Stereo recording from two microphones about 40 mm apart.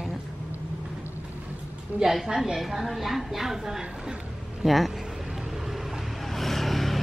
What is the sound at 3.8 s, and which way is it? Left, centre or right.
Speech, right.